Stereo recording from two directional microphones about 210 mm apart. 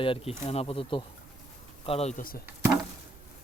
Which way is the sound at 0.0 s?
25° left (ahead or behind).